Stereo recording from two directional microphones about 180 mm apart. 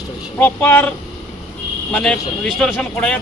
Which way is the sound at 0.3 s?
10° left (ahead or behind).